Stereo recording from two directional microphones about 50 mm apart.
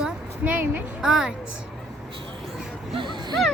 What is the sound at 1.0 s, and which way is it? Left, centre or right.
Speech, centre.